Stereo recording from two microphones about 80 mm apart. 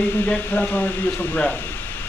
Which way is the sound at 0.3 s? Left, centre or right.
Left.